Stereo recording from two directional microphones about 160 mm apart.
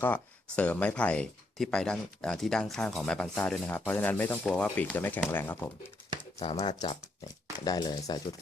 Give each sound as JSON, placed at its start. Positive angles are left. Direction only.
{"t": 0.0, "sound": "speech", "side_deg": 10}
{"t": 6.4, "sound": "speech", "side_deg": 35}